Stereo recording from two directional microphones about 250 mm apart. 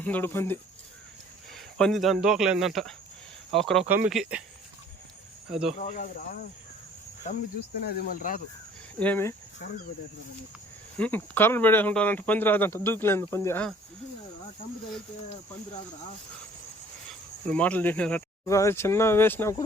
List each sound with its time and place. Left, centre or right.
0.0 s speech: centre
5.5 s speech: centre
5.9 s speech: left
7.8 s speech: left
9.0 s speech: centre
10.9 s speech: centre
17.1 s speech: centre